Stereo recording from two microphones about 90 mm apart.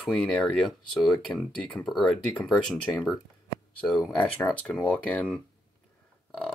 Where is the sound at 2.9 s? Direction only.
25° left (ahead or behind).